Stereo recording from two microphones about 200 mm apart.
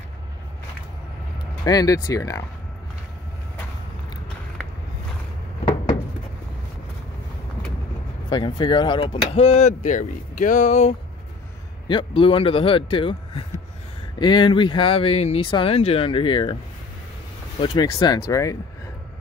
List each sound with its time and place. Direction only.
1.6 s speech: 20° left (ahead or behind)
8.3 s speech: 20° left (ahead or behind)
11.9 s speech: 25° left (ahead or behind)
17.6 s speech: 20° left (ahead or behind)